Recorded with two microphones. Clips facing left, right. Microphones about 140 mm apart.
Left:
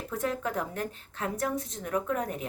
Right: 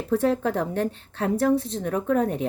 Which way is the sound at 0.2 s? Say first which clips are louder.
Right 8 dB; 30° right (ahead or behind).